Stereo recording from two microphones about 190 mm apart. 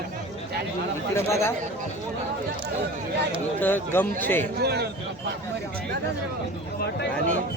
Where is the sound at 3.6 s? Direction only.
10° left (ahead or behind).